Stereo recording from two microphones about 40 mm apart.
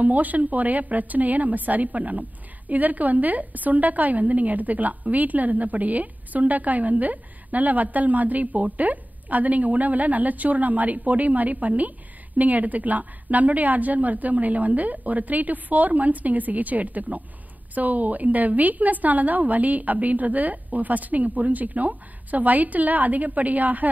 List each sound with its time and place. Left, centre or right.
0.0 s a woman's voice: right